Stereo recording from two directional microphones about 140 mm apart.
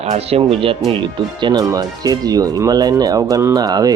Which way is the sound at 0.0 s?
45° right (ahead or behind).